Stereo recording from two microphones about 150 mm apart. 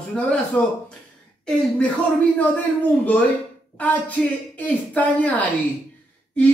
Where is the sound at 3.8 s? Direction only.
10° left (ahead or behind).